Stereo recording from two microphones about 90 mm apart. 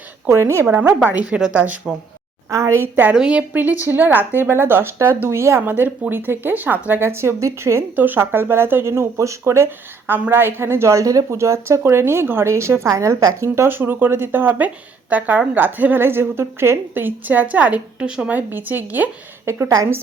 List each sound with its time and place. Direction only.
0.3 s speech: 30° right (ahead or behind)
0.9 s a woman's voice: 15° right (ahead or behind)
2.5 s speech: 35° right (ahead or behind)
2.9 s a woman's voice: 20° right (ahead or behind)
19.5 s speech: 35° right (ahead or behind)